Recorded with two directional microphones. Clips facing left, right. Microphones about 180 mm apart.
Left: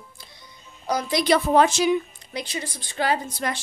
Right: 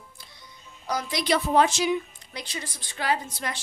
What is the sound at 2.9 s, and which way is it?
Child singing, 35° left (ahead or behind).